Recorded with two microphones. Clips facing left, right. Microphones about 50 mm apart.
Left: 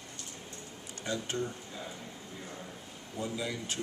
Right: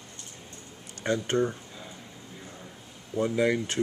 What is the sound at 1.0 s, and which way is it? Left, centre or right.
Speech, right.